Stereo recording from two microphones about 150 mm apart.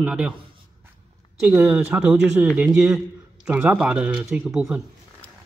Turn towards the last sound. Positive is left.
turn(degrees=-5)  # may be behind; listen again after turning